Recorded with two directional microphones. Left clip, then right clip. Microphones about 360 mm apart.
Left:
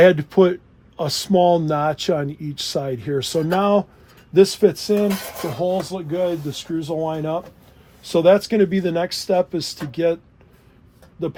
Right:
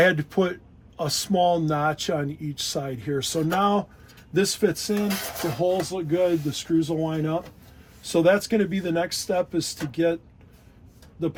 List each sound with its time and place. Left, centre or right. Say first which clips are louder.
0.0 s speech: left 7 dB; left